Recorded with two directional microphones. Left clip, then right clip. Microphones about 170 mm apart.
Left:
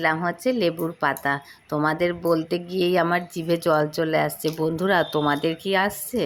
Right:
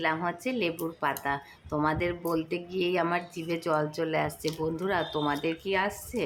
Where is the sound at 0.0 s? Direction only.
35° left (ahead or behind).